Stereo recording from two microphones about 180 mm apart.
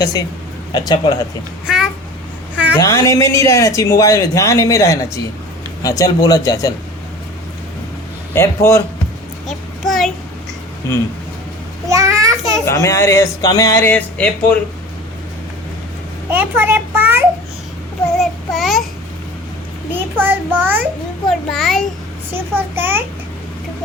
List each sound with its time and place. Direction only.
0.0 s speech: 20° left (ahead or behind)
1.6 s a sound: 5° right (ahead or behind)
2.7 s a man's voice: 15° left (ahead or behind)
8.4 s a man's voice: 15° left (ahead or behind)
9.5 s child singing: centre (ahead or behind)
11.9 s a sound: 15° right (ahead or behind)
12.6 s a man's voice: 15° left (ahead or behind)
16.3 s a child's voice: 10° right (ahead or behind)
18.2 s child singing: centre (ahead or behind)
20.1 s a child's voice: 10° right (ahead or behind)
21.2 s a child's voice: centre (ahead or behind)
22.3 s a child's voice: 10° right (ahead or behind)